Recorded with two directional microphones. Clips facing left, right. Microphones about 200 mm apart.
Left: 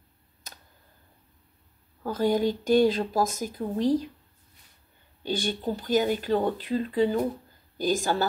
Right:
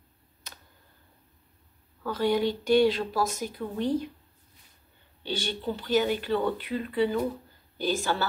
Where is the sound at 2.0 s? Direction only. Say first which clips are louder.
Left 1 dB; 45° left (ahead or behind).